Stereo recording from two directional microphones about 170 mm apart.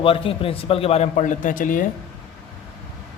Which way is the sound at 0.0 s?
30° left (ahead or behind).